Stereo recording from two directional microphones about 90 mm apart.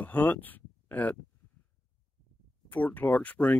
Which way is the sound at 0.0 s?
20° left (ahead or behind).